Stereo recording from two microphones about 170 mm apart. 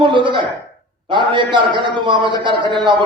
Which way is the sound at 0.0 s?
30° right (ahead or behind).